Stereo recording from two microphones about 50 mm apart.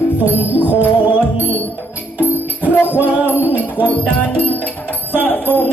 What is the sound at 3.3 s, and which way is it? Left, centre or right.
Music, left.